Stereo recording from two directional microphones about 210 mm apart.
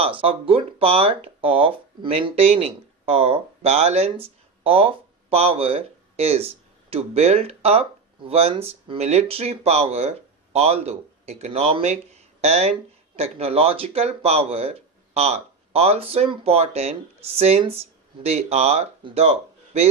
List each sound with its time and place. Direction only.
0.0 s speech: 25° right (ahead or behind)